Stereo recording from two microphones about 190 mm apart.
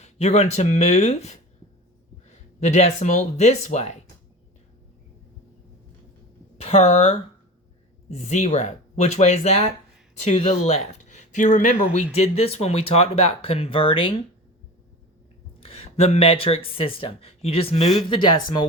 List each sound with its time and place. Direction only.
0.0 s speech: 35° left (ahead or behind)
6.6 s speech: 35° left (ahead or behind)
15.6 s speech: 30° left (ahead or behind)